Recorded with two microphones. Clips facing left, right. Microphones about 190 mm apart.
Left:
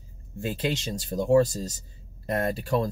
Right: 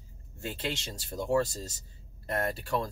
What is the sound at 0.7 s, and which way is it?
Speech, 20° left (ahead or behind).